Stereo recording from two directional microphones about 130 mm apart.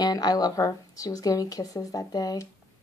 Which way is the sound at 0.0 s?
30° left (ahead or behind).